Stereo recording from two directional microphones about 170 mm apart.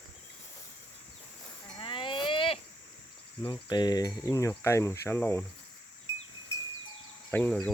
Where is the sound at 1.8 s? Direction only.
30° left (ahead or behind).